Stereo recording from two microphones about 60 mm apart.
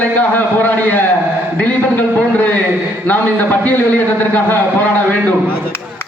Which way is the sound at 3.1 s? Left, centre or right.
Left.